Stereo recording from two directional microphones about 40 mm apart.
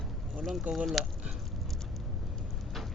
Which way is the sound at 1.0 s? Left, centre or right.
Centre.